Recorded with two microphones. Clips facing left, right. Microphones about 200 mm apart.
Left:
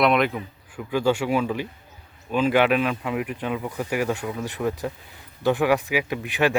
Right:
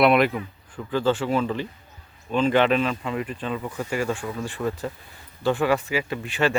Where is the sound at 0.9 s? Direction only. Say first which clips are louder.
Left 1 dB; 10° left (ahead or behind).